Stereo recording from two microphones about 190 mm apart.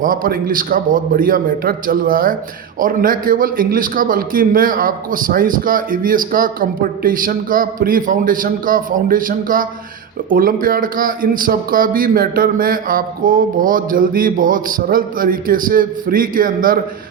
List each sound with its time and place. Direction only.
0.0 s a man's voice: 45° right (ahead or behind)